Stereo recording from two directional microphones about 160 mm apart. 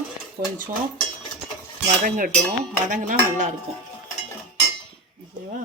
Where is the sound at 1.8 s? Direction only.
60° right (ahead or behind).